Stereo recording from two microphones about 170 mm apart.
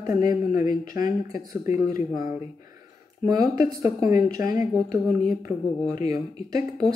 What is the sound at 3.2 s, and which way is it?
Speech, 20° right (ahead or behind).